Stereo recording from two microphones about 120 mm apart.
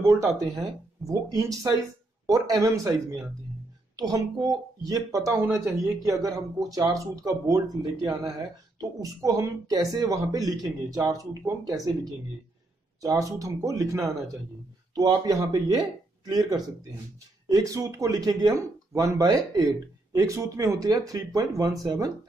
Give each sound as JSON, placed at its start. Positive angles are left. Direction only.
{"t": 0.0, "sound": "a man's voice", "side_deg": -25}